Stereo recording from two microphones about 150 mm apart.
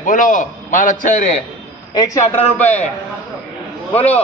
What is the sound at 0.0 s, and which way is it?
A man's voice, 60° left (ahead or behind).